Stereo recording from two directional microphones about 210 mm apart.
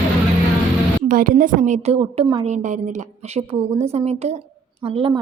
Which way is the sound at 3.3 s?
30° right (ahead or behind).